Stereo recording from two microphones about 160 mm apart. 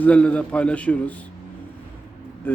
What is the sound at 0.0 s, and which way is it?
Speech, 10° left (ahead or behind).